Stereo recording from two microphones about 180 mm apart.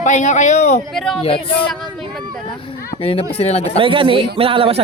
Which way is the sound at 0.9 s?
Centre (ahead or behind).